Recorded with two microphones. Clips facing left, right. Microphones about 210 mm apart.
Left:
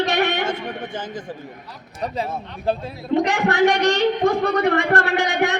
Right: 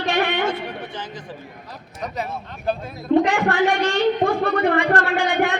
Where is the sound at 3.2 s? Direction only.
40° left (ahead or behind).